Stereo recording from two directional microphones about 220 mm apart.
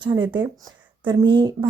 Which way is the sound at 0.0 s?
20° right (ahead or behind).